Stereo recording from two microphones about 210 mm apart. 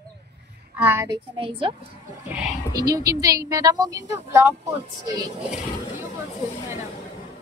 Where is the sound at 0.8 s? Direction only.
15° right (ahead or behind).